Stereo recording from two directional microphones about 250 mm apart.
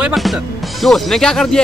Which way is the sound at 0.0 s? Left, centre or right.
Centre.